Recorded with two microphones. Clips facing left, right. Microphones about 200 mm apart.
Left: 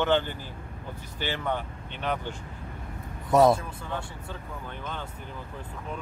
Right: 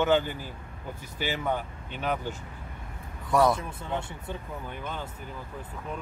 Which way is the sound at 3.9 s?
15° right (ahead or behind).